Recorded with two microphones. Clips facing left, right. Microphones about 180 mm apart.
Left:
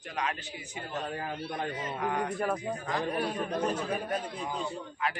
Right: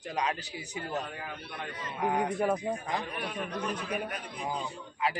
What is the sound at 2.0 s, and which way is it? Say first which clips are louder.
Speech: right 4 dB; 15° right (ahead or behind).